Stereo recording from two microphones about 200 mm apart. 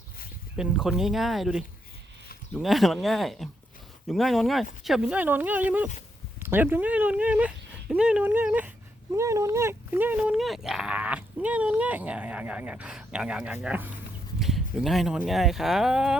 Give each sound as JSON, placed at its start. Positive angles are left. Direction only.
{"t": 0.5, "sound": "speech", "side_deg": -5}